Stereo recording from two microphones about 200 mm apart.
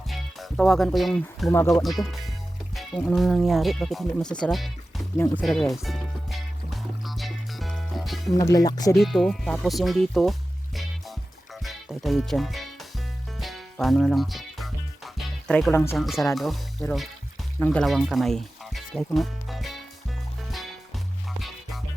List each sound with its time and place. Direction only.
0.1 s speech: centre (ahead or behind)
1.5 s speech: 15° left (ahead or behind)
1.7 s speech: centre (ahead or behind)
5.1 s speech: 10° left (ahead or behind)
5.4 s music: centre (ahead or behind)
8.5 s speech: 20° left (ahead or behind)
9.0 s speech: centre (ahead or behind)
10.8 s music: centre (ahead or behind)
11.6 s speech: centre (ahead or behind)
13.4 s music: centre (ahead or behind)
16.0 s speech: centre (ahead or behind)
17.6 s speech: 5° left (ahead or behind)
20.5 s music: centre (ahead or behind)